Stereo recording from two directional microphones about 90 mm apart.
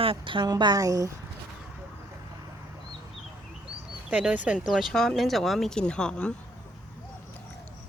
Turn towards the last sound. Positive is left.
turn(degrees=10)  # may be behind; listen again after turning